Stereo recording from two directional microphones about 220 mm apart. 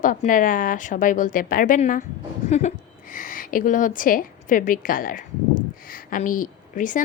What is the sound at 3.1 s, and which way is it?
A woman's voice, 40° left (ahead or behind).